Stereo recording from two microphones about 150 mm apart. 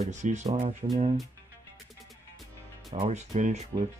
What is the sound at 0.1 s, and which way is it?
Speech, 50° right (ahead or behind).